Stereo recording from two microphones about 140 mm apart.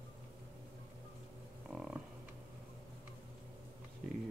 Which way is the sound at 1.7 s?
5° right (ahead or behind).